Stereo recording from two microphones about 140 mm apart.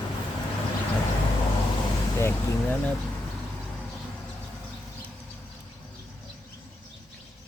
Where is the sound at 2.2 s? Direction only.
15° left (ahead or behind).